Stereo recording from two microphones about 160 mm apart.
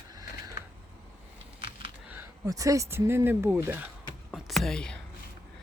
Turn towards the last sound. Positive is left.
turn(degrees=5)  # may be behind; listen again after turning